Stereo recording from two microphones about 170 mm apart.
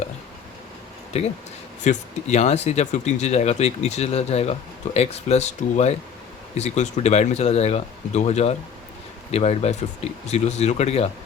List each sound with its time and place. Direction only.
1.1 s speech: 35° left (ahead or behind)